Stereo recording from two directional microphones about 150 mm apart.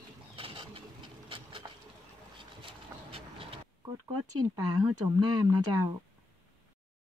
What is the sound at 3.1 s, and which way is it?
Vehicle, 40° right (ahead or behind).